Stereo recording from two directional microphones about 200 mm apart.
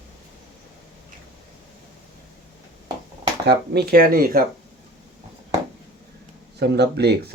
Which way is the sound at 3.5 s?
50° right (ahead or behind).